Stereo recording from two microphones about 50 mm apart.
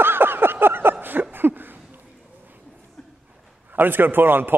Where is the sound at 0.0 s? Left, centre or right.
Right.